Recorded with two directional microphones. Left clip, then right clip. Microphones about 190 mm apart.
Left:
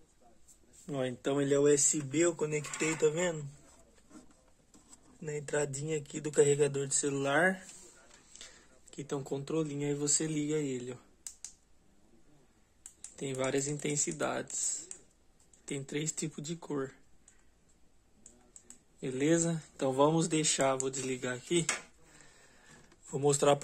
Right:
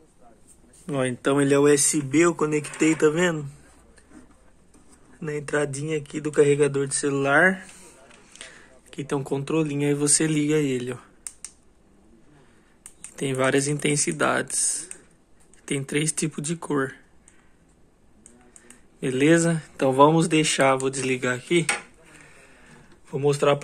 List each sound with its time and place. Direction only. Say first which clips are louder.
0.8 s speech: right 10 dB; 5° left (ahead or behind)
5.2 s speech: right 9 dB; 10° left (ahead or behind)
8.3 s speech: right 10 dB; centre (ahead or behind)
13.1 s speech: right 11 dB; centre (ahead or behind)
15.6 s speech: right 11 dB; centre (ahead or behind)
18.9 s speech: right 11 dB; centre (ahead or behind)
22.1 s printer: right 10 dB; 10° left (ahead or behind)
23.0 s speech: right 7 dB; 25° left (ahead or behind)